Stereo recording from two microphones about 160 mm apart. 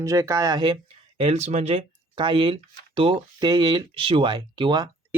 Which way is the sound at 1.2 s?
40° right (ahead or behind).